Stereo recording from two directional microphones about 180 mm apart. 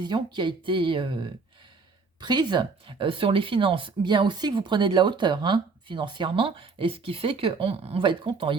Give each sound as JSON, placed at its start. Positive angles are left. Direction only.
{"t": 0.0, "sound": "speech", "side_deg": -25}